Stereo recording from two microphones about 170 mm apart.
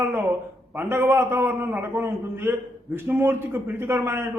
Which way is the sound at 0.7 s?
10° right (ahead or behind).